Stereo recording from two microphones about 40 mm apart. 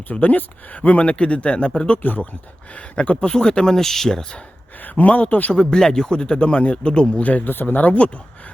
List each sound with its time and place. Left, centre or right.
0.1 s speech: left
2.0 s speech: left
2.7 s speech: left; by 4.4 s centre
5.0 s speech: left
5.5 s a man's voice: centre
6.4 s a man's voice: left
7.2 s speech: left
7.5 s speech: left